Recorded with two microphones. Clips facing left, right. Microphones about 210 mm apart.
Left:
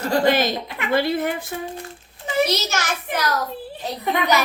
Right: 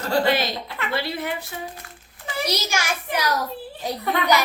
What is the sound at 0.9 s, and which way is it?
Speech, 50° left (ahead or behind).